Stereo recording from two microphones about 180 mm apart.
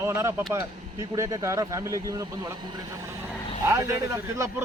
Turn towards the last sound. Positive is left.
turn(degrees=-15)  # may be behind; listen again after turning